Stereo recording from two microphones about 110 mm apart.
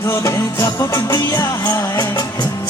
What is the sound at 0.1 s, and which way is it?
Music, 25° left (ahead or behind).